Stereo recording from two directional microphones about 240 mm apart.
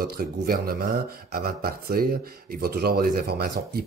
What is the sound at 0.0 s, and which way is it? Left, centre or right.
Speech, right.